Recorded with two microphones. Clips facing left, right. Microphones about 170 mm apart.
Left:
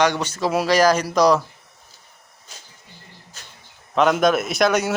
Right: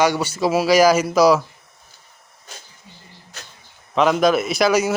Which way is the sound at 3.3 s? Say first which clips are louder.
Right 6 dB; 75° right (ahead or behind).